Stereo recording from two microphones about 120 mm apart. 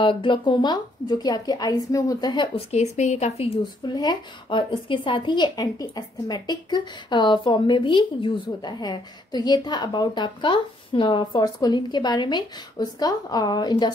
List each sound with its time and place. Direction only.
0.0 s a woman's voice: 45° left (ahead or behind)
2.7 s speech: 70° left (ahead or behind)
3.8 s a woman's voice: 35° left (ahead or behind)